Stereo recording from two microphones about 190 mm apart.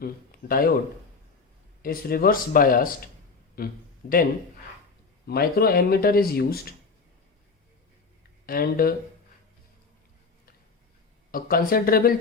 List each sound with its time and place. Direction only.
0.0 s speech: 50° left (ahead or behind)
1.8 s speech: 50° left (ahead or behind)
5.2 s speech: 55° left (ahead or behind)
8.4 s speech: 50° left (ahead or behind)
11.3 s speech: 50° left (ahead or behind)